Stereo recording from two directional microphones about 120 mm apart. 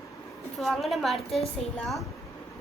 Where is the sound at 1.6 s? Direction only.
60° left (ahead or behind).